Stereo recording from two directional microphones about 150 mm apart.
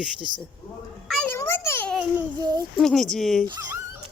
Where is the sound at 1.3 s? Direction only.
15° left (ahead or behind).